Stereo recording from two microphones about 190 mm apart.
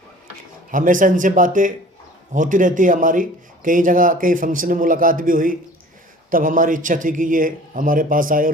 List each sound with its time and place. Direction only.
0.7 s a man's voice: 45° right (ahead or behind)